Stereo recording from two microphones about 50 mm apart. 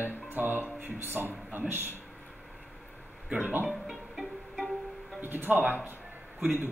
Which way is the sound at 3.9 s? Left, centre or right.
Centre.